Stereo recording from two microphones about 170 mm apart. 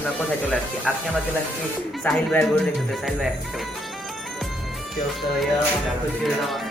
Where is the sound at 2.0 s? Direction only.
5° left (ahead or behind).